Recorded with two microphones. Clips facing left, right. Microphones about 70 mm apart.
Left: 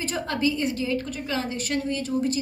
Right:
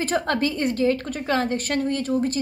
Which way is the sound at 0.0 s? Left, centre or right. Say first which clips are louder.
Right 3 dB; right.